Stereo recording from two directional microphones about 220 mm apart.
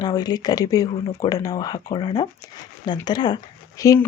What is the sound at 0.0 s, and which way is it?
Speech, 15° left (ahead or behind).